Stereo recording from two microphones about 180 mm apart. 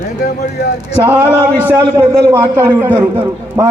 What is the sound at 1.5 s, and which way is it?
A man's voice, 15° right (ahead or behind).